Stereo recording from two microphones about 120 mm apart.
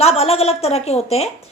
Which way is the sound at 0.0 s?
60° left (ahead or behind).